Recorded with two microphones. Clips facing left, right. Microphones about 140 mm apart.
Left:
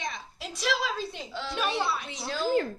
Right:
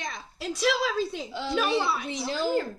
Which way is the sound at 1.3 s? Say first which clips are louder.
Right 4 dB; 15° right (ahead or behind).